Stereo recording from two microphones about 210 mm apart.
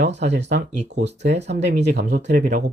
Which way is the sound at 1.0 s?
55° right (ahead or behind).